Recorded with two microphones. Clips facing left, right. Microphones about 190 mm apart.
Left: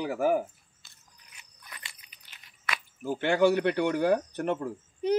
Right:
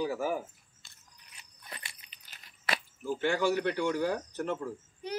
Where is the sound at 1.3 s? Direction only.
30° right (ahead or behind).